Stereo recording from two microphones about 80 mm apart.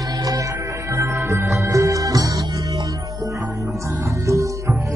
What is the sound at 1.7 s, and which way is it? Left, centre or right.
Music, right.